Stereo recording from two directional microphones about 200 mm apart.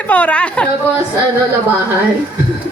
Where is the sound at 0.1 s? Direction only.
5° left (ahead or behind).